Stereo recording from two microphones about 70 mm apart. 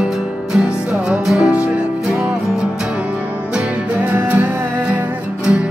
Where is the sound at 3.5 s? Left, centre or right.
Right.